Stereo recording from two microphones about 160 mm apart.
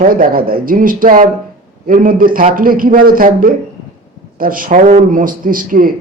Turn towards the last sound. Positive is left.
turn(degrees=-60)  # may be behind; listen again after turning